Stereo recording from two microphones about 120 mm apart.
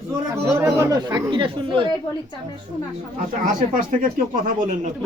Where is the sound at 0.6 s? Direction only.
25° right (ahead or behind); by 1.9 s 45° right (ahead or behind).